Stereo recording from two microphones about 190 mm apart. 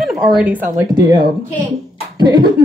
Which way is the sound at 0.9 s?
25° right (ahead or behind).